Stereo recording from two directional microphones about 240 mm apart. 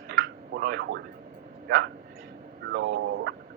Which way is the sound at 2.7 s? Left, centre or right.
Right.